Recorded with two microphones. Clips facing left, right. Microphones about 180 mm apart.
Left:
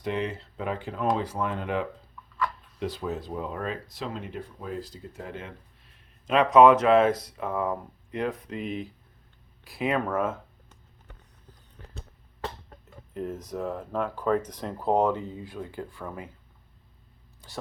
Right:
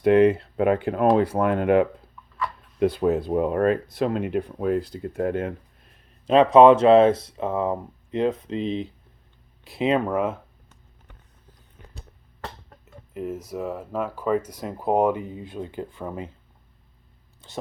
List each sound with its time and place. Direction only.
0.0 s speech: 60° right (ahead or behind)
6.2 s speech: 30° right (ahead or behind)
11.8 s a sound: 15° right (ahead or behind)
12.4 s speech: 5° right (ahead or behind); by 16.3 s 20° right (ahead or behind)
17.4 s speech: 25° right (ahead or behind)